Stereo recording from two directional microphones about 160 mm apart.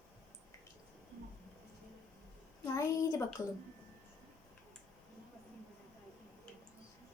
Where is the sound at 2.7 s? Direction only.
20° left (ahead or behind).